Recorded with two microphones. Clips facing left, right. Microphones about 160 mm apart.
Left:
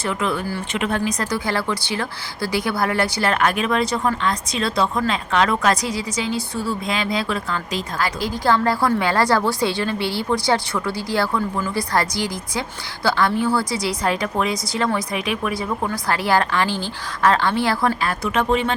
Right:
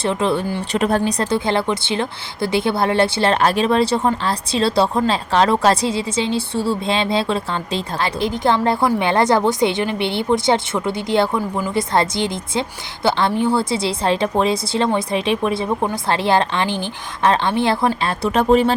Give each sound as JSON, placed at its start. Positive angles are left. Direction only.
{"t": 0.0, "sound": "a woman's voice", "side_deg": -30}
{"t": 0.7, "sound": "a woman's voice", "side_deg": -35}